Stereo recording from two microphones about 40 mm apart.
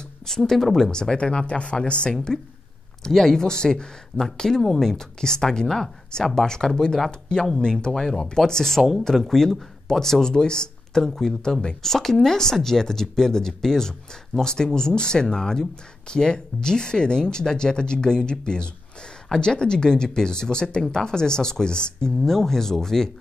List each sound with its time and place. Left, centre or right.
0.3 s speech: centre
0.9 s speech: left
3.0 s speech: centre
22.2 s speech: centre